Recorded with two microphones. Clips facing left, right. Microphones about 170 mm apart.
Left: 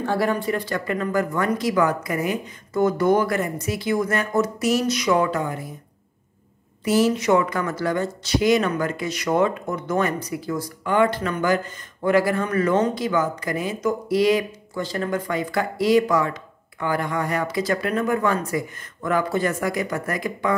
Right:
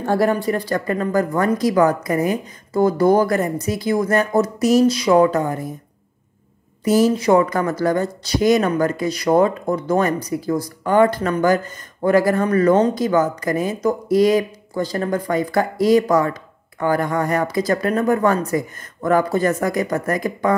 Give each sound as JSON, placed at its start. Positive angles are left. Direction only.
{"t": 0.0, "sound": "speech", "side_deg": -45}
{"t": 6.8, "sound": "speech", "side_deg": -40}